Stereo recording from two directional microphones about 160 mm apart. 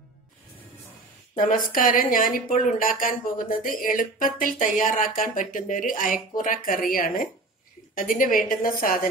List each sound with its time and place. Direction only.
1.3 s a woman's voice: 55° left (ahead or behind)